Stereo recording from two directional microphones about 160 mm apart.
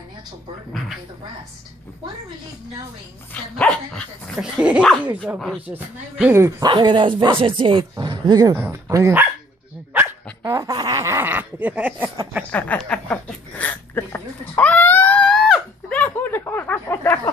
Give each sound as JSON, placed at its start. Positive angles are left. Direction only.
{"t": 3.3, "sound": "speech", "side_deg": 5}
{"t": 6.7, "sound": "speech", "side_deg": -30}
{"t": 9.9, "sound": "dog", "side_deg": -15}
{"t": 10.4, "sound": "laughter", "side_deg": -20}
{"t": 12.5, "sound": "a sound", "side_deg": 10}
{"t": 13.6, "sound": "whimper", "side_deg": 10}